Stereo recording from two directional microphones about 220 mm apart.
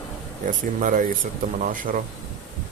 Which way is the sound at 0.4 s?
35° right (ahead or behind).